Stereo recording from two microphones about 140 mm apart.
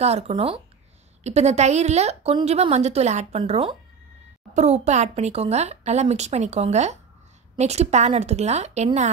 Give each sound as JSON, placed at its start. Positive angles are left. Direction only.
{"t": 0.0, "sound": "a woman's voice", "side_deg": -50}
{"t": 1.2, "sound": "a woman's voice", "side_deg": -50}